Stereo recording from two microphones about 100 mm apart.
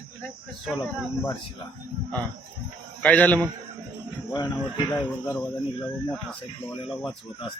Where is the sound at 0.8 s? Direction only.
30° left (ahead or behind).